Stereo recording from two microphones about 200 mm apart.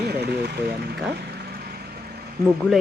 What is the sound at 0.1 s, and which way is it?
Vehicle, 55° right (ahead or behind).